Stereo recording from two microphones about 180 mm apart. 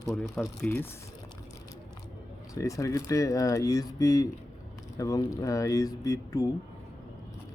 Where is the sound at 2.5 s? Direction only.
15° left (ahead or behind).